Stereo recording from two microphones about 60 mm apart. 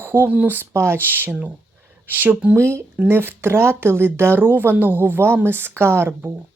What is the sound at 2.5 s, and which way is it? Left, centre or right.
Speech, right.